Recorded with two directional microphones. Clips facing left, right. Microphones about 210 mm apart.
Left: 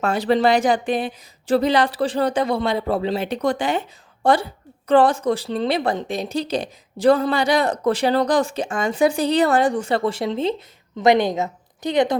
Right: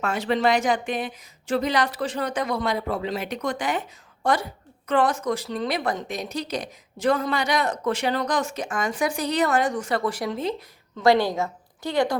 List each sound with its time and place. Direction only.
0.0 s a woman's voice: 35° left (ahead or behind); by 12.1 s 20° left (ahead or behind)